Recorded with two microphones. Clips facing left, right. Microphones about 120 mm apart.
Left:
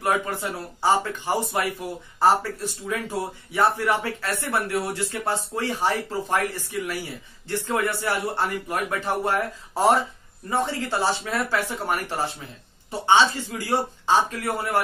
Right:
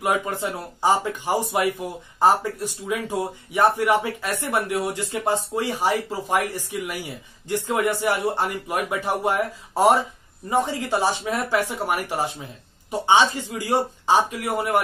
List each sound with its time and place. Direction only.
0.0 s a man's voice: 15° right (ahead or behind)